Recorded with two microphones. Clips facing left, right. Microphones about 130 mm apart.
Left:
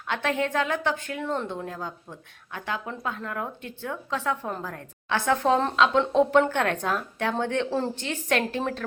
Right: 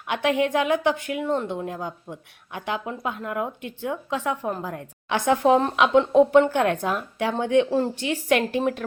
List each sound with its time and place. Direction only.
0.1 s speech: 15° right (ahead or behind)
6.0 s speech: 5° right (ahead or behind)